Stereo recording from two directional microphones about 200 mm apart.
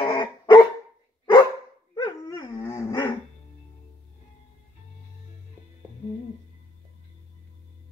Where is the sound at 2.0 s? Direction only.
20° left (ahead or behind).